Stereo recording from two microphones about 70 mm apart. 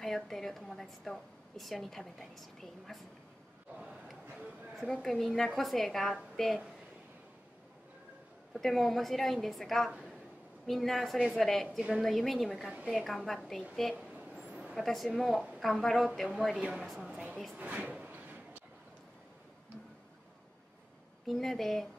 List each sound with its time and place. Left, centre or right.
0.0 s a woman's voice: centre
4.8 s a woman's voice: centre
8.5 s a woman's voice: centre
9.8 s a woman's voice: centre
10.7 s a woman's voice: centre
13.9 s vehicle: centre
14.8 s a woman's voice: centre
17.1 s speech: centre
21.3 s a woman's voice: centre